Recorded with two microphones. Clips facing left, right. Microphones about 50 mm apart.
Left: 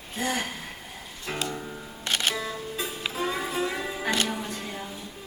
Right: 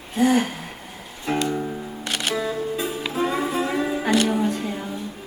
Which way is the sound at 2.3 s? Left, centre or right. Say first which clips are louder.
Right 7 dB; centre.